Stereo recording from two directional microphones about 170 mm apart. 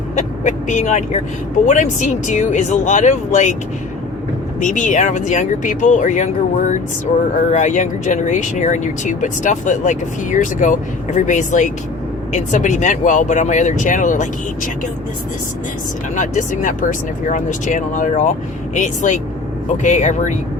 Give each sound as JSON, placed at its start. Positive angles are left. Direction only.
{"t": 0.2, "sound": "speech", "side_deg": 45}
{"t": 4.6, "sound": "speech", "side_deg": 50}
{"t": 16.1, "sound": "speech", "side_deg": 50}